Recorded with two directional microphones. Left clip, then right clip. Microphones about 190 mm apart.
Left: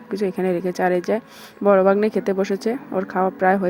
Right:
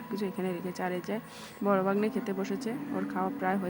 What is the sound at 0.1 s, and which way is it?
Speech, 35° left (ahead or behind).